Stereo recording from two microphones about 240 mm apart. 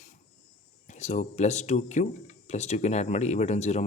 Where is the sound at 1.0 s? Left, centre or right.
Left.